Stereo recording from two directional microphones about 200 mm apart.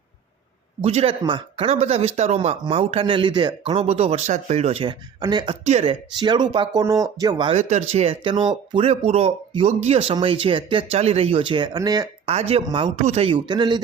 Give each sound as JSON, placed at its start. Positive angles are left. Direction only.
{"t": 0.8, "sound": "speech", "side_deg": -30}
{"t": 7.5, "sound": "speech", "side_deg": -35}
{"t": 12.3, "sound": "speech", "side_deg": -30}